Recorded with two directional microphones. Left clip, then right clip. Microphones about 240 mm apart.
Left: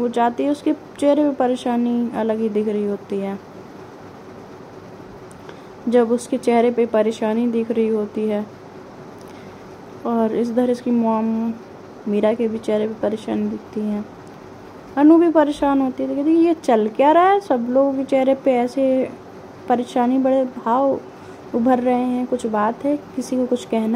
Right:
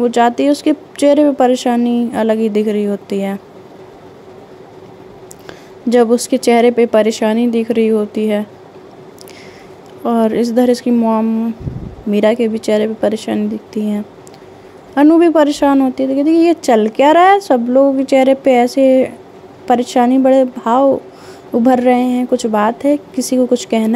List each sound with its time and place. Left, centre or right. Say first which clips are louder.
0.0 s a woman's voice: right 7 dB; right
5.9 s a woman's voice: right 6 dB; right
10.0 s a woman's voice: right 6 dB; right
15.0 s a woman's voice: right 4 dB; right